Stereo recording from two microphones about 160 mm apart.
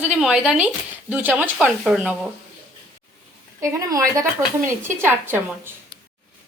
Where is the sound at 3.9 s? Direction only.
20° right (ahead or behind).